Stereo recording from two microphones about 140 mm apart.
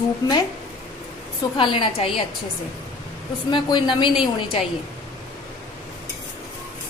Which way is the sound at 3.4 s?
30° left (ahead or behind).